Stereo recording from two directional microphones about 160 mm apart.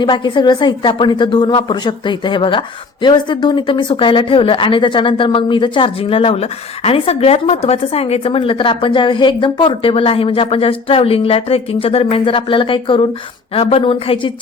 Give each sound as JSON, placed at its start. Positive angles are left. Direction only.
{"t": 0.0, "sound": "a woman's voice", "side_deg": 30}